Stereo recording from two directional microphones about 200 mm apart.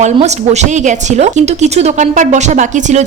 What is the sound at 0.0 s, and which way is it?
Speech, 35° right (ahead or behind).